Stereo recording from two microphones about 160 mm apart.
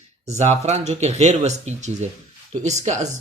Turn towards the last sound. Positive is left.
turn(degrees=-45)  # may be behind; listen again after turning